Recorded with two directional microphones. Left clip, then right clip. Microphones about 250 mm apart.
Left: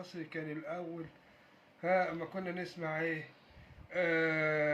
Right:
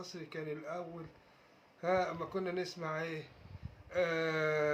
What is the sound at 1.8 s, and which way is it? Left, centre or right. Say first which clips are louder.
Speech: left 1 dB; centre.